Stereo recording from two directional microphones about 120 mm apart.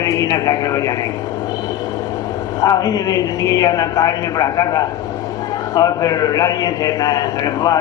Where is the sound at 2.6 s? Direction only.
30° left (ahead or behind).